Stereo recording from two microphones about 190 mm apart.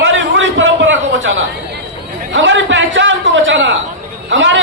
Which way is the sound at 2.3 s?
75° right (ahead or behind).